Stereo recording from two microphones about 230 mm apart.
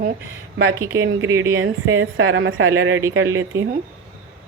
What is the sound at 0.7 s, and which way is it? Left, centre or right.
Speech, centre.